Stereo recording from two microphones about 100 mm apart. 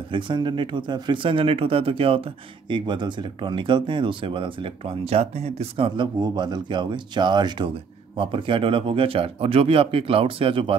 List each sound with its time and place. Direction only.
0.1 s speech: 50° right (ahead or behind); by 2.2 s 70° right (ahead or behind)
2.7 s speech: 50° right (ahead or behind); by 5.9 s 90° right
5.9 s speech: 50° right (ahead or behind)